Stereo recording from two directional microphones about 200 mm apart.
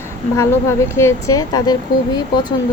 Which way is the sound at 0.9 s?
15° left (ahead or behind).